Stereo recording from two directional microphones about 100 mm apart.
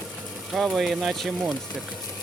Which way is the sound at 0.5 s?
Centre (ahead or behind).